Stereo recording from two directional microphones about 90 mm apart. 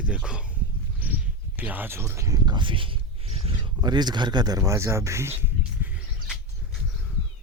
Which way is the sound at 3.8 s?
50° right (ahead or behind).